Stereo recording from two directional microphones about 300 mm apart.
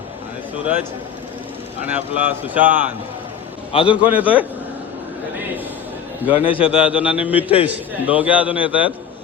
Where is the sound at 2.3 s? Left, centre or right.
Centre.